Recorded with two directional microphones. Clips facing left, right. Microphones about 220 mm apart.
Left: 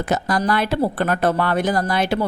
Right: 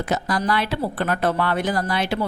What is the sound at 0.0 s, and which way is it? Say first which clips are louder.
A woman's voice: left 3 dB; 45° left (ahead or behind).